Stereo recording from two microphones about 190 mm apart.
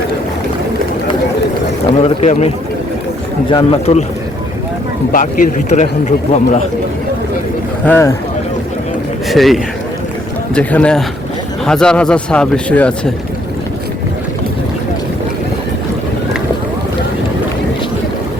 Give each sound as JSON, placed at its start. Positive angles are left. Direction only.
{"t": 2.0, "sound": "a man's voice", "side_deg": 35}
{"t": 3.5, "sound": "a man's voice", "side_deg": 30}
{"t": 5.1, "sound": "a man's voice", "side_deg": 45}
{"t": 7.9, "sound": "speech", "side_deg": 10}
{"t": 9.3, "sound": "speech", "side_deg": 0}